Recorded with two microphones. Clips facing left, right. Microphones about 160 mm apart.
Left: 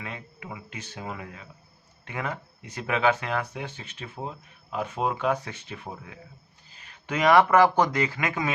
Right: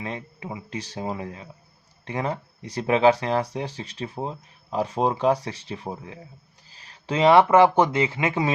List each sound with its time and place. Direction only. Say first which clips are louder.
0.0 s speech: right 6 dB; 30° right (ahead or behind)